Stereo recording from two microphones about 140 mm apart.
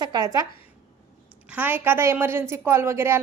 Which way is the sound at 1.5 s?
15° right (ahead or behind).